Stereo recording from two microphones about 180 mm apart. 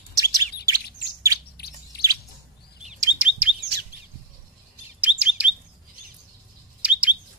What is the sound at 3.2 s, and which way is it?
Chirp, 5° right (ahead or behind).